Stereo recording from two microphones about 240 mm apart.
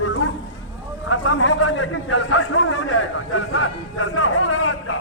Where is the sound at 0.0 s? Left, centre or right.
Left.